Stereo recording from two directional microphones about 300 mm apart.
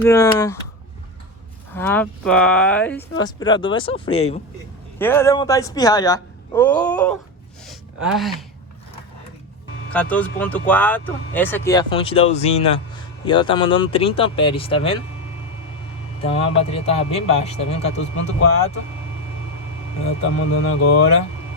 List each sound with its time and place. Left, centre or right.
0.0 s speech: centre
1.7 s speech: centre
4.9 s speech: centre
7.7 s a sound: centre
9.9 s speech: centre
16.2 s a man's voice: centre
17.8 s speech: left